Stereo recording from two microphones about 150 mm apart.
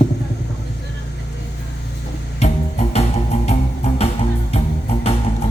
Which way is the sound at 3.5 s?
45° left (ahead or behind).